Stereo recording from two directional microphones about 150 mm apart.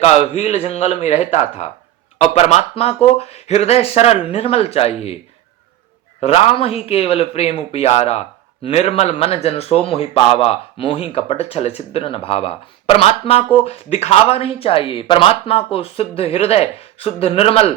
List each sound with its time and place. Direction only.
0.0 s speech: 45° left (ahead or behind)